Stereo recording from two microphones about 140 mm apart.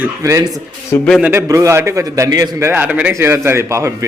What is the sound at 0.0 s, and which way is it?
A man's voice, 20° right (ahead or behind).